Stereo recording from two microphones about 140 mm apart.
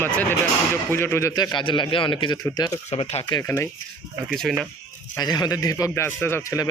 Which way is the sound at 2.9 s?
45° left (ahead or behind).